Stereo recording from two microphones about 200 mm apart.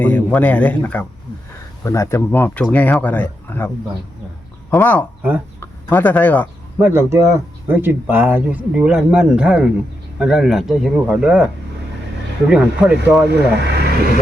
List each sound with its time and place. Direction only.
0.0 s speech: 5° left (ahead or behind)
4.7 s speech: 10° left (ahead or behind)
6.7 s speech: 10° right (ahead or behind)
12.5 s speech: 5° right (ahead or behind)
13.7 s speech: 55° right (ahead or behind)